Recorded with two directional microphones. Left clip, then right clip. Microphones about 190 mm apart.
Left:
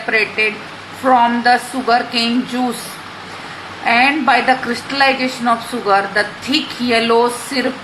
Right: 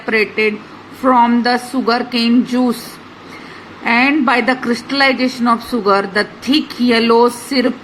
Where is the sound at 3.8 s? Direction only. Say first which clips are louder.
Left 1 dB; 35° right (ahead or behind).